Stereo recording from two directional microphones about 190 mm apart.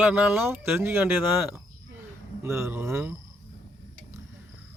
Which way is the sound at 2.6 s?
10° right (ahead or behind).